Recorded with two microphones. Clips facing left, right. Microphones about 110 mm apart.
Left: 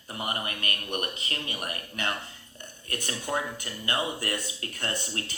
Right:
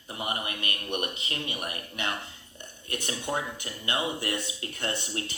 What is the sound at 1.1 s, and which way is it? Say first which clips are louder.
Speech: even; 25° right (ahead or behind).